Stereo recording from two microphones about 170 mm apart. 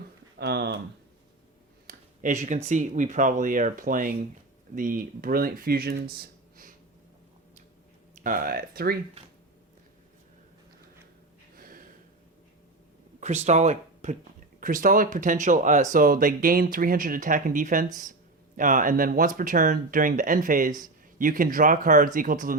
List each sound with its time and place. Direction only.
0.3 s speech: 70° right (ahead or behind)
1.9 s a sound: 45° right (ahead or behind)
2.6 s speech: 45° right (ahead or behind); by 5.9 s 60° right (ahead or behind)
6.1 s a sound: 55° right (ahead or behind)
8.2 s speech: 55° right (ahead or behind)
11.5 s gasp: 55° right (ahead or behind)
13.1 s speech: 40° right (ahead or behind)